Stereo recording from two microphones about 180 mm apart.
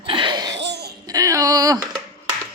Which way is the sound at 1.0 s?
20° right (ahead or behind).